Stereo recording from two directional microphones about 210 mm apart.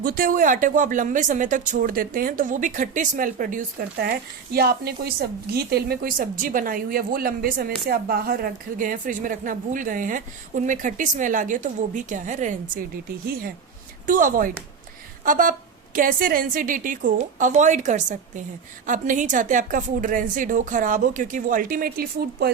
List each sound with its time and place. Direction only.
0.0 s a woman's voice: 45° right (ahead or behind)
14.1 s a woman's voice: 40° right (ahead or behind)
15.2 s a sound: 40° right (ahead or behind)
16.0 s a woman's voice: 40° right (ahead or behind)